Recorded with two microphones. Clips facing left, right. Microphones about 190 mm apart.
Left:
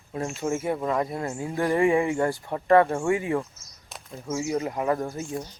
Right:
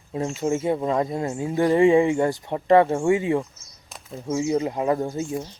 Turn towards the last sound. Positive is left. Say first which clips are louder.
# right 3 dB
turn(degrees=-20)  # may be behind; listen again after turning